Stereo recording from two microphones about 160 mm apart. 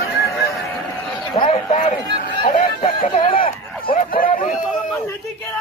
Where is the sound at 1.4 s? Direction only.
40° left (ahead or behind).